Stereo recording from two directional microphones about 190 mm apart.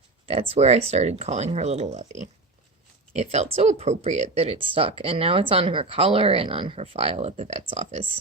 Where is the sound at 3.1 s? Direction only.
35° right (ahead or behind).